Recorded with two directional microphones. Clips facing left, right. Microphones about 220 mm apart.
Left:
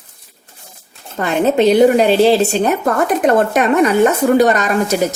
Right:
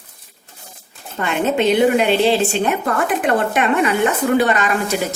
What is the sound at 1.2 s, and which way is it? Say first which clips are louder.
A woman's voice: left 5 dB; 35° left (ahead or behind).